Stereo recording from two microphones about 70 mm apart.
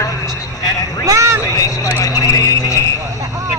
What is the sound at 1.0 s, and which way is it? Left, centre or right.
Vehicle, right.